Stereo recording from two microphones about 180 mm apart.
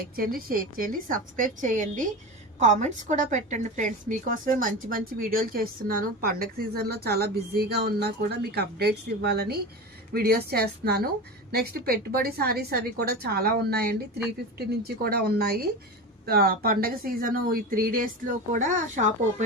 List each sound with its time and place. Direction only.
0.2 s a woman's voice: 55° right (ahead or behind)